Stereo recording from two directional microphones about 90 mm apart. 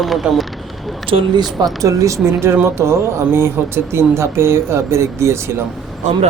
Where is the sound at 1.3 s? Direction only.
55° right (ahead or behind).